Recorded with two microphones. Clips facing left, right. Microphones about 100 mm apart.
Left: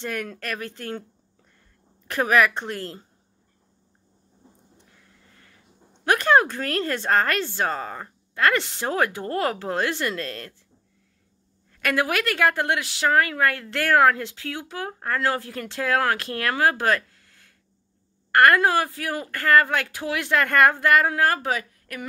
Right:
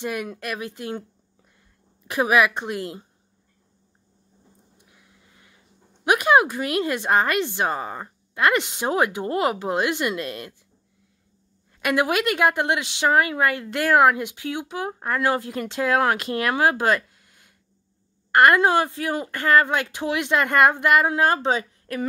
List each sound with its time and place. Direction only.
0.0 s speech: 15° right (ahead or behind)
2.0 s speech: 15° right (ahead or behind)
4.7 s a sound: 15° right (ahead or behind)
6.0 s speech: 15° right (ahead or behind)
11.8 s a woman's voice: 20° right (ahead or behind)